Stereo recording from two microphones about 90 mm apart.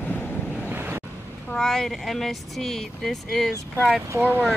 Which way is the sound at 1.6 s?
5° left (ahead or behind).